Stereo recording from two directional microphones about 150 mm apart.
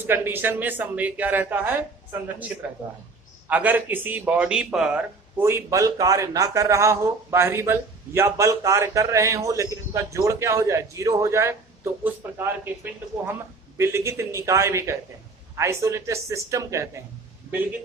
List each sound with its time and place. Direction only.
0.0 s speech: 15° right (ahead or behind)
5.4 s speech: 15° right (ahead or behind)